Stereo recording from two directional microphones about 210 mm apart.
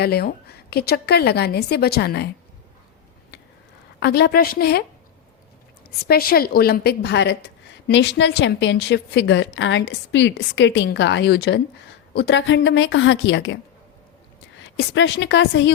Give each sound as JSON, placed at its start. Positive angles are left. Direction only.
{"t": 0.0, "sound": "a woman's voice", "side_deg": 50}
{"t": 4.0, "sound": "a woman's voice", "side_deg": 50}
{"t": 6.1, "sound": "a woman's voice", "side_deg": 45}
{"t": 14.6, "sound": "a woman's voice", "side_deg": 60}